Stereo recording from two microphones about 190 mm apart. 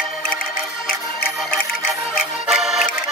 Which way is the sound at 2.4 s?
5° right (ahead or behind).